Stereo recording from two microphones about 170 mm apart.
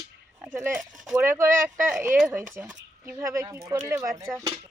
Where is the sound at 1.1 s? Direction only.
15° right (ahead or behind).